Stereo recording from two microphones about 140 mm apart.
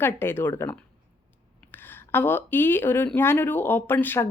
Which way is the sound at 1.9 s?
15° left (ahead or behind).